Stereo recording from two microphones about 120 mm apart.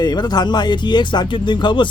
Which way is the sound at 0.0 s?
35° left (ahead or behind).